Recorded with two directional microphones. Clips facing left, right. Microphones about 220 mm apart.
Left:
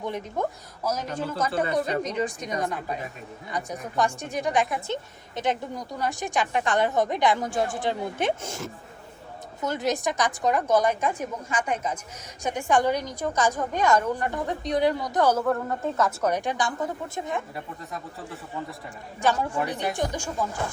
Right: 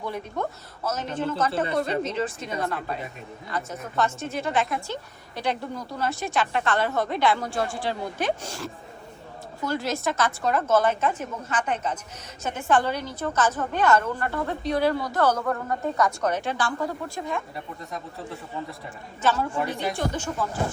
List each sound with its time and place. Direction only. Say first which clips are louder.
0.0 s a man's voice: left 1 dB; 20° left (ahead or behind); by 16.3 s centre (ahead or behind)
16.3 s a woman's voice: even; 15° left (ahead or behind)
19.2 s a woman's voice: even; 15° left (ahead or behind)